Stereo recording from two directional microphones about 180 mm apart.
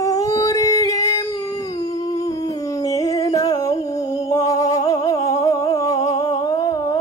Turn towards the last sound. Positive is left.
turn(degrees=20)  # may be behind; listen again after turning